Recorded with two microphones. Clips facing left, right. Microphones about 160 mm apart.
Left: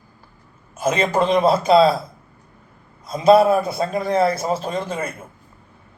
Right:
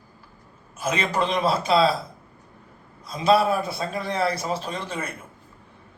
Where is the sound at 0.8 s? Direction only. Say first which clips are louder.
Left 6 dB; 40° left (ahead or behind).